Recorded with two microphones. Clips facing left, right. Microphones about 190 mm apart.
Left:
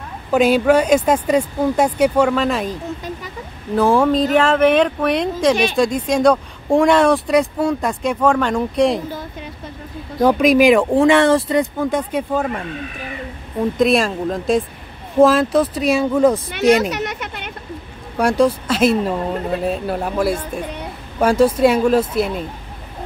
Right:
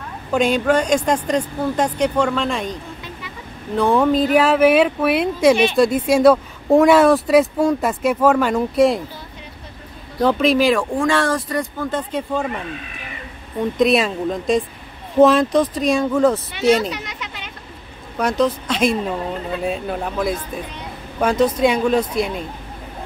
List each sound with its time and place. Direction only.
0.3 s speech: 5° left (ahead or behind)
10.2 s speech: 15° left (ahead or behind)
11.8 s speech: 10° left (ahead or behind)
13.7 s speech: centre (ahead or behind)
16.9 s a sound: 65° left (ahead or behind)
18.1 s speech: 10° left (ahead or behind)